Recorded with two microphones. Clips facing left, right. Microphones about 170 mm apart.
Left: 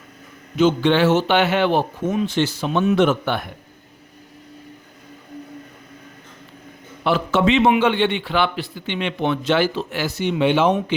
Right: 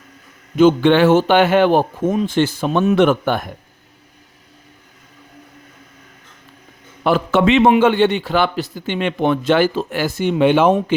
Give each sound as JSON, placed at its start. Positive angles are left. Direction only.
{"t": 0.5, "sound": "a man's voice", "side_deg": -55}
{"t": 2.9, "sound": "a man's voice", "side_deg": -60}
{"t": 7.0, "sound": "a man's voice", "side_deg": -55}
{"t": 7.7, "sound": "a man's voice", "side_deg": -45}